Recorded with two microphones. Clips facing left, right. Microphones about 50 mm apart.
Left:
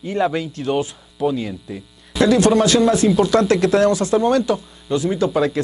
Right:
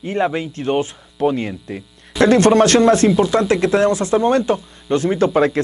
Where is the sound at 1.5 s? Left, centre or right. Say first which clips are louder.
Right 2 dB; right.